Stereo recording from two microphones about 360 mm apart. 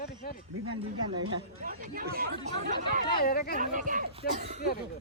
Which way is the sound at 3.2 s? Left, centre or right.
Left.